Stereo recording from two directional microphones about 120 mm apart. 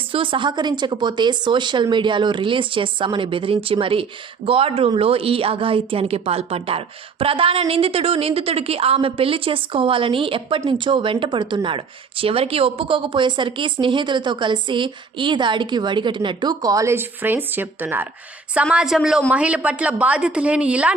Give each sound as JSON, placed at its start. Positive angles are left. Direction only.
{"t": 0.1, "sound": "a woman's voice", "side_deg": -45}